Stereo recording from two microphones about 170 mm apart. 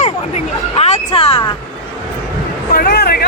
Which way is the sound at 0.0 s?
40° left (ahead or behind).